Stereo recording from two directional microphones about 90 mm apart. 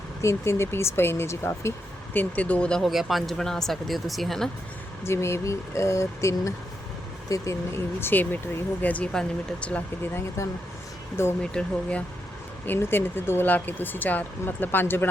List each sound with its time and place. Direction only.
0.2 s speech: 30° left (ahead or behind)
2.1 s speech: 15° left (ahead or behind)
2.8 s speech: centre (ahead or behind)
5.0 s speech: 30° left (ahead or behind)
8.0 s speech: 20° left (ahead or behind)
10.4 s speech: 35° left (ahead or behind)
11.5 s speech: 15° left (ahead or behind)
12.6 s speech: 25° left (ahead or behind)